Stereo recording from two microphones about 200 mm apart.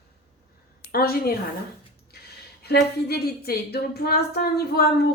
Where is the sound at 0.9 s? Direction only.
50° left (ahead or behind).